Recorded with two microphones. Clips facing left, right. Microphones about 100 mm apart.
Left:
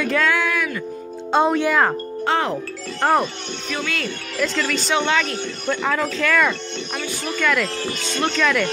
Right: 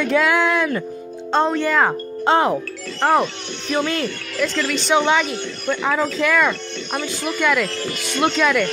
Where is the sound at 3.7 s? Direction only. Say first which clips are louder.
Right 7 dB; 35° right (ahead or behind).